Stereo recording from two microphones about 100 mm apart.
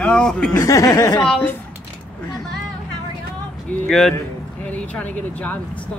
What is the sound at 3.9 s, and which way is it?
A man's voice, 5° left (ahead or behind).